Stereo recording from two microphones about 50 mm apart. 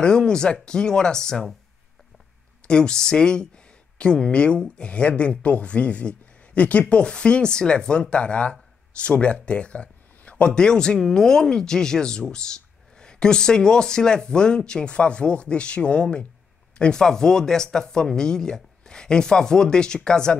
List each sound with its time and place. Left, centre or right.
0.0 s speech: centre
2.6 s speech: centre